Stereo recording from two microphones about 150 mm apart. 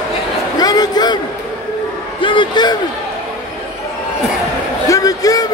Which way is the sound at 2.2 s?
35° left (ahead or behind).